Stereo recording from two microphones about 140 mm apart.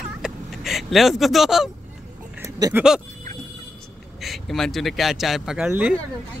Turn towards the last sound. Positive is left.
turn(degrees=-10)  # may be behind; listen again after turning